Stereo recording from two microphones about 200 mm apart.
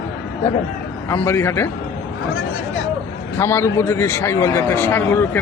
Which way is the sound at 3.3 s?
10° left (ahead or behind).